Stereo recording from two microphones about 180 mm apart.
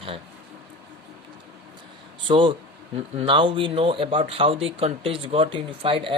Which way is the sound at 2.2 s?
30° right (ahead or behind).